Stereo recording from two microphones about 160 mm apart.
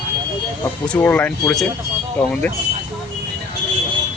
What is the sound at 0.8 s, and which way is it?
Speech, 10° left (ahead or behind).